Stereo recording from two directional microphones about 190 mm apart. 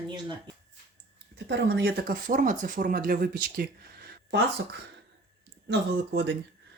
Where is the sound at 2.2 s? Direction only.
45° right (ahead or behind).